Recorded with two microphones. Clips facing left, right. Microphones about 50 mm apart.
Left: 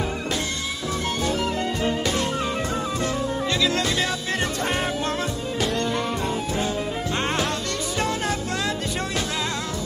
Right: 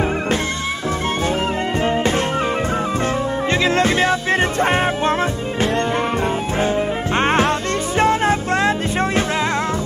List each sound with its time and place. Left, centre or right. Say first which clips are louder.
1.8 s music: right 8 dB; right
7.2 s music: right 10 dB; right